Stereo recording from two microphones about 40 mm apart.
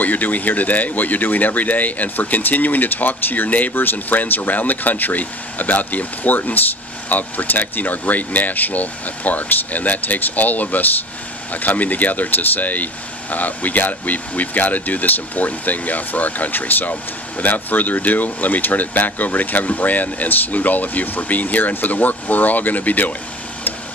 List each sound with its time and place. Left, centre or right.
0.0 s speech: left
3.7 s speech: left